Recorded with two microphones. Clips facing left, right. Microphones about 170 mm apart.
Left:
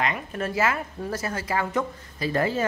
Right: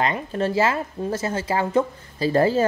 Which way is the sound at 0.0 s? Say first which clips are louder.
Right 5 dB; 30° right (ahead or behind).